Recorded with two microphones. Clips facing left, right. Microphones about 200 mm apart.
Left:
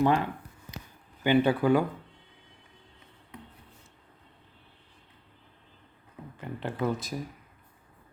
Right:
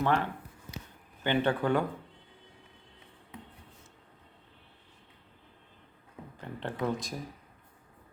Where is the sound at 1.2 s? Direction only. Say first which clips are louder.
Left 5 dB; 10° left (ahead or behind).